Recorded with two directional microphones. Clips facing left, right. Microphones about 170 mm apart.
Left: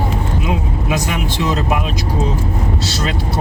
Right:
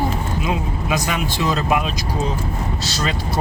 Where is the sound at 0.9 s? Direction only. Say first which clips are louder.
Left 1 dB; 20° left (ahead or behind).